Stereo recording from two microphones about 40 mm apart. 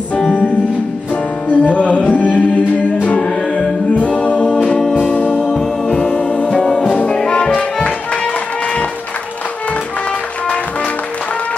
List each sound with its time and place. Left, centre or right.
0.3 s music: left
4.6 s music: centre
4.9 s music: left